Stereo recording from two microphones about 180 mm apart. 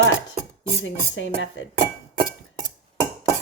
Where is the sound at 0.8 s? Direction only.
90° left.